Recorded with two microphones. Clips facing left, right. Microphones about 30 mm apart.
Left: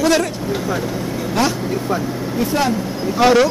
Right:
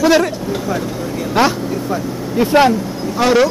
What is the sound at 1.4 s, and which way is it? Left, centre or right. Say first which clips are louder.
Speech: right 4 dB; right.